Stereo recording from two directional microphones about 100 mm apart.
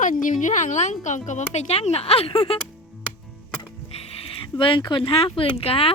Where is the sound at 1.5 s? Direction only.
90° left; by 2.6 s 75° left (ahead or behind).